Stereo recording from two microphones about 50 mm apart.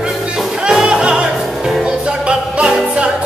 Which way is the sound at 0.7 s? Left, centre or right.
Centre.